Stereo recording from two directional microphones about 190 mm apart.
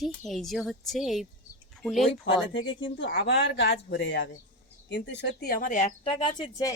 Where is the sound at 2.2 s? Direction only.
85° left.